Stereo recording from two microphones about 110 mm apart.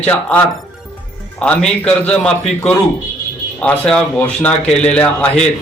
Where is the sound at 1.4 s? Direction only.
10° left (ahead or behind).